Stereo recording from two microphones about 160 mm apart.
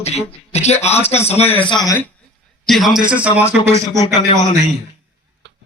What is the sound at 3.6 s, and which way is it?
Speech, 20° right (ahead or behind).